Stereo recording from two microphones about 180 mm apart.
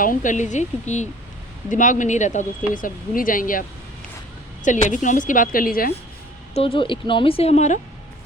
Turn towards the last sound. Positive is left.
turn(degrees=35)  # may be behind; listen again after turning